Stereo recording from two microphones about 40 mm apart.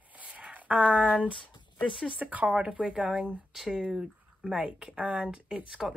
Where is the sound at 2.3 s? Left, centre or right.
Right.